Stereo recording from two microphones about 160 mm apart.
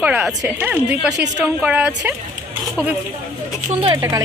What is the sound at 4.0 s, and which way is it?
Speech, 20° right (ahead or behind).